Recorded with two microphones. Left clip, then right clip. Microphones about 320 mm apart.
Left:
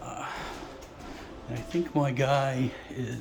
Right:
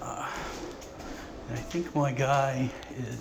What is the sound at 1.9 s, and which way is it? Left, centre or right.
Speech, centre.